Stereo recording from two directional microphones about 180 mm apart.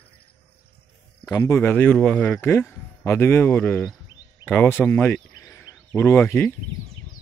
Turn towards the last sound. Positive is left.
turn(degrees=10)  # may be behind; listen again after turning